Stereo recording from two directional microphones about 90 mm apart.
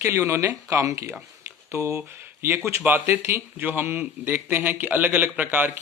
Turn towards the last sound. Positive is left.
turn(degrees=-20)  # may be behind; listen again after turning